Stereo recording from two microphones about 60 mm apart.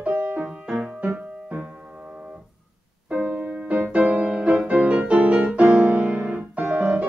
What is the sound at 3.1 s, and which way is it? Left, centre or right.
Music, right.